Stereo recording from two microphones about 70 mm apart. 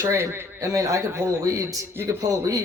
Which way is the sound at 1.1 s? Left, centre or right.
Right.